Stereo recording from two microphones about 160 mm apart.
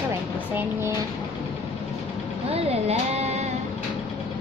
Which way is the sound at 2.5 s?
40° right (ahead or behind).